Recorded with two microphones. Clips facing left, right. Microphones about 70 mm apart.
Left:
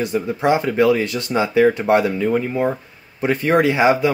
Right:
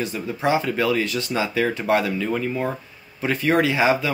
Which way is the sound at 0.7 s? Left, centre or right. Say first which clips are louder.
Left 5 dB; left.